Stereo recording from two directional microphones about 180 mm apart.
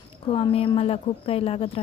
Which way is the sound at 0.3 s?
30° left (ahead or behind).